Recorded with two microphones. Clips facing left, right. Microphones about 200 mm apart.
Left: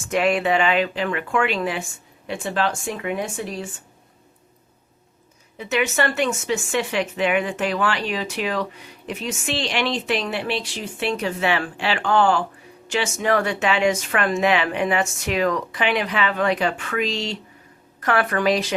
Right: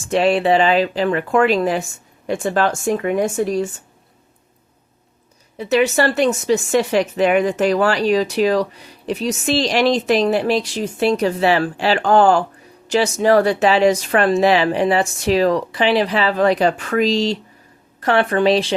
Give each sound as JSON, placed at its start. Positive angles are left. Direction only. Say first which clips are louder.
{"t": 0.1, "sound": "speech", "louder": "right 5 dB", "side_deg": -30}
{"t": 5.5, "sound": "a woman's voice", "louder": "right 6 dB", "side_deg": -35}